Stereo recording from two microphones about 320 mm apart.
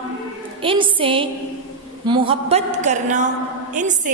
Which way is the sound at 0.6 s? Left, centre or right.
Centre.